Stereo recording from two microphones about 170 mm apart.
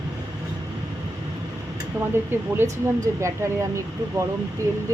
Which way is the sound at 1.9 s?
15° right (ahead or behind).